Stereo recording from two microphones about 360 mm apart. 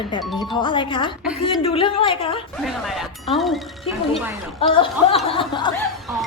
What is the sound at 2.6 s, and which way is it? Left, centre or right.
Speech, centre.